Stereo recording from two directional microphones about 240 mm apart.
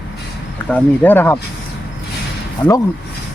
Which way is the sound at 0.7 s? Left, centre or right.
Centre.